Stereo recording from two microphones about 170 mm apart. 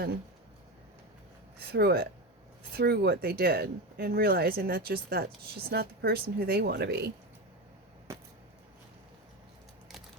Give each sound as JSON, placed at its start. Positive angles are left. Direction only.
{"t": 1.5, "sound": "speech", "side_deg": -70}